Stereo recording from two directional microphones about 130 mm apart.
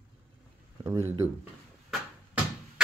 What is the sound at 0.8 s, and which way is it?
Speech, 20° right (ahead or behind).